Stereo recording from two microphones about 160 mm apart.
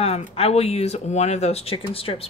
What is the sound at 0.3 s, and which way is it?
Speech, 40° left (ahead or behind).